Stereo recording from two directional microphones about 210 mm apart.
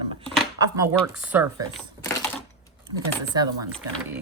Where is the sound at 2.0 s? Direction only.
10° left (ahead or behind).